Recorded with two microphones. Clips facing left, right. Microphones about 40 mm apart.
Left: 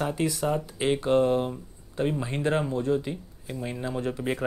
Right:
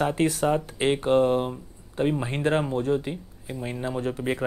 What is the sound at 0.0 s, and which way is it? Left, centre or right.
Speech, right.